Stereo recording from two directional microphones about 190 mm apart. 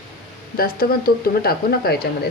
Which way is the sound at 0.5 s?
50° left (ahead or behind).